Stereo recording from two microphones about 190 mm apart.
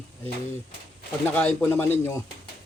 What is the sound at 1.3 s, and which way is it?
Speech, 10° left (ahead or behind).